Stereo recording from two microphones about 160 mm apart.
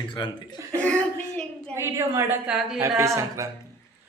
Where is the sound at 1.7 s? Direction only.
15° right (ahead or behind).